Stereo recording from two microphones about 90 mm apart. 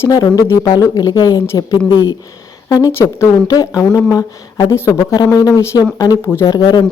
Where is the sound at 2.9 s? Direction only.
30° left (ahead or behind).